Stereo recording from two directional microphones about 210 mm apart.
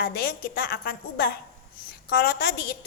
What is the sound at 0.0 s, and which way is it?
A woman's voice, 45° left (ahead or behind).